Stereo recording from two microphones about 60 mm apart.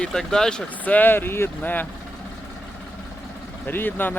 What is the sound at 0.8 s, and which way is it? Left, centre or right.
Speech, left.